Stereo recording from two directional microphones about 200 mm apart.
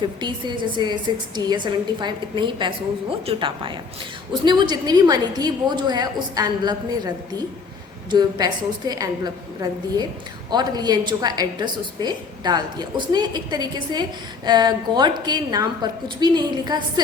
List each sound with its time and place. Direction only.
0.0 s a woman's voice: 20° right (ahead or behind)